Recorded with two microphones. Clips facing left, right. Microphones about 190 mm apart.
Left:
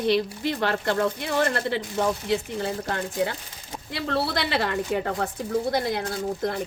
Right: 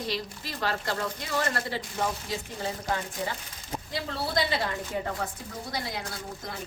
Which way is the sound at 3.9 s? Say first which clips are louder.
Left 5 dB; 70° left (ahead or behind).